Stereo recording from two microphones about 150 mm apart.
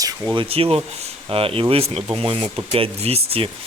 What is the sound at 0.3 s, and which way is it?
Speech, 40° right (ahead or behind).